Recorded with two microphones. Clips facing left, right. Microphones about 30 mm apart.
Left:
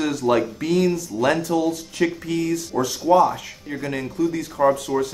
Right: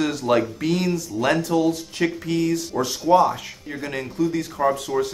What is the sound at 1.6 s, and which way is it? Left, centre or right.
Speech, right.